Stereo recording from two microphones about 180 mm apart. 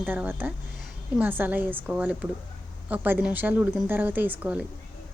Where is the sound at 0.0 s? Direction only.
10° right (ahead or behind).